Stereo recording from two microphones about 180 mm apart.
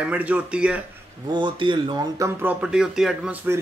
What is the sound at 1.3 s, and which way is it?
Speech, 25° right (ahead or behind).